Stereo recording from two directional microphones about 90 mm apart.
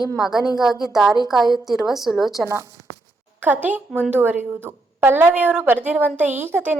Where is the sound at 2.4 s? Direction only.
35° right (ahead or behind).